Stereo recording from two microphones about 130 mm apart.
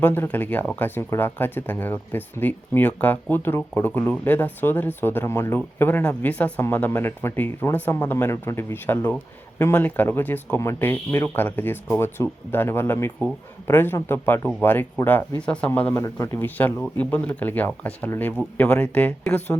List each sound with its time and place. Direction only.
0.0 s speech: 15° left (ahead or behind)